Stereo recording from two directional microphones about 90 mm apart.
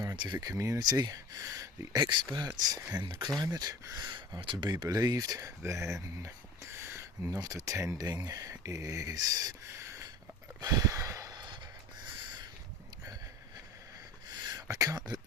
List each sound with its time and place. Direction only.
0.2 s speech: 55° right (ahead or behind)
0.4 s speech: 35° right (ahead or behind)
2.9 s speech: 55° right (ahead or behind)
3.4 s speech: 45° right (ahead or behind)
4.0 s speech: 55° right (ahead or behind)
4.7 s speech: 45° right (ahead or behind)
7.3 s speech: 45° right (ahead or behind)
9.7 s a sound: 35° right (ahead or behind)
14.3 s a sound: 50° right (ahead or behind)